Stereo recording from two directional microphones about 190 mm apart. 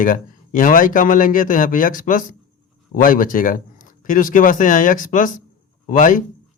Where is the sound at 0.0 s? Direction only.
45° left (ahead or behind).